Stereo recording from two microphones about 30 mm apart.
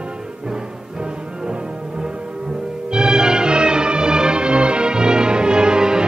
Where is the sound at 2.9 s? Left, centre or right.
Right.